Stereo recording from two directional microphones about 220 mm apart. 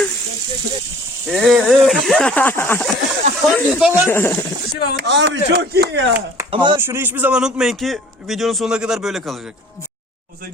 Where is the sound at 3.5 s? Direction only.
Centre (ahead or behind).